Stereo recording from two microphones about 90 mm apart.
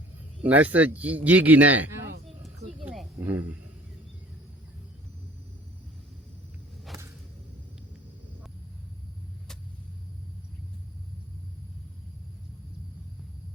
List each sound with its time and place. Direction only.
0.4 s speech: 15° right (ahead or behind)
3.2 s speech: 20° right (ahead or behind)